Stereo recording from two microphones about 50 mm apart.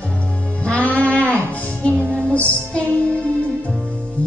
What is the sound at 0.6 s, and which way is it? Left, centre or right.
Music, left.